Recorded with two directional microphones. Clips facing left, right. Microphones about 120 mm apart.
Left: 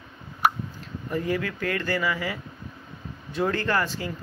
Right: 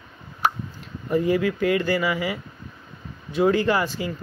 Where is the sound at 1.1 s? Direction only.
15° right (ahead or behind).